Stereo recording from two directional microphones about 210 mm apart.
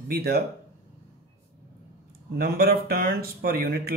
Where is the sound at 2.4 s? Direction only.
45° right (ahead or behind).